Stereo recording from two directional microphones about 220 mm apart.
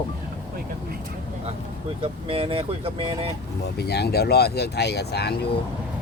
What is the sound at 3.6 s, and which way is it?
Speech, 45° left (ahead or behind).